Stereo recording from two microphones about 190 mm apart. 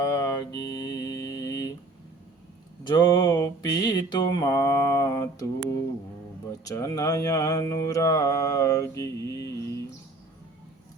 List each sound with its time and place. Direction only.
0.0 s mantra: 20° left (ahead or behind)
2.8 s mantra: 20° left (ahead or behind)
6.7 s mantra: 20° left (ahead or behind)